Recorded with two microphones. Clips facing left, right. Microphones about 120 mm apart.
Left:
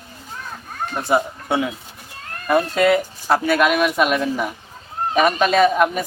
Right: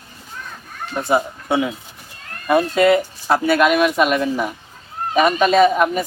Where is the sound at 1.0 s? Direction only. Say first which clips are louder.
Right 1 dB; centre (ahead or behind).